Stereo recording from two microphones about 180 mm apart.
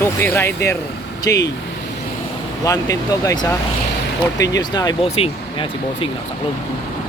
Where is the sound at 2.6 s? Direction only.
20° left (ahead or behind).